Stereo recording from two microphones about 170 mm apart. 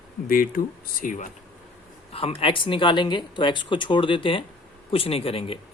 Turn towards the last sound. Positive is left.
turn(degrees=35)  # may be behind; listen again after turning